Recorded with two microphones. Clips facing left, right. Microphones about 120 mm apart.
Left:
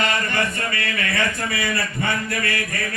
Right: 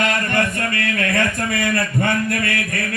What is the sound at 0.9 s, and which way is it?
Mantra, 50° right (ahead or behind).